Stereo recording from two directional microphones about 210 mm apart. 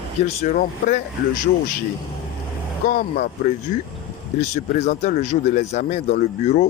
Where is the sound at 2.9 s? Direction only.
40° left (ahead or behind).